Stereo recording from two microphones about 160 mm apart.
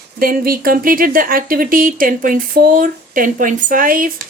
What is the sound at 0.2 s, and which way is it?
Speech, 65° right (ahead or behind).